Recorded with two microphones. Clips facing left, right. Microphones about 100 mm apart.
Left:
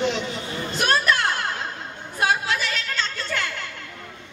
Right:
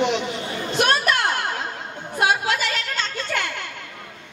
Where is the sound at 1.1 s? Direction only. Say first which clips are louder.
Right 1 dB; 20° right (ahead or behind).